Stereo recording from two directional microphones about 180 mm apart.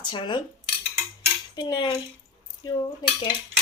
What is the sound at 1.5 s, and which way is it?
A woman's voice, 25° left (ahead or behind).